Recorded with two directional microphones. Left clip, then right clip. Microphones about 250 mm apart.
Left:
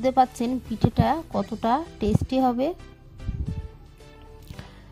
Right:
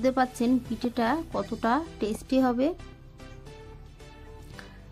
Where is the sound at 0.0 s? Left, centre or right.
Left.